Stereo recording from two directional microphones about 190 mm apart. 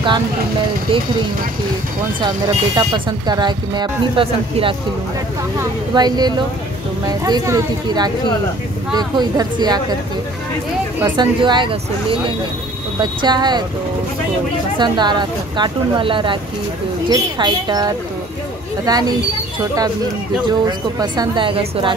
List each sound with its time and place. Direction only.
2.1 s speech: 25° right (ahead or behind)
11.1 s speech: 25° right (ahead or behind)
14.8 s speech: 25° right (ahead or behind)
20.4 s speech: 20° right (ahead or behind)